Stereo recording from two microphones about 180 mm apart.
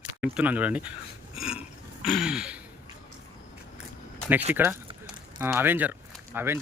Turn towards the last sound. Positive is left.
turn(degrees=-15)  # may be behind; listen again after turning